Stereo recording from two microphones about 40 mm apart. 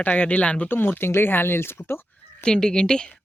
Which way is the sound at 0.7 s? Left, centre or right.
Left.